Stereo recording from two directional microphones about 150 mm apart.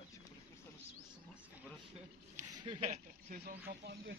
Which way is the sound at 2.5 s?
30° right (ahead or behind).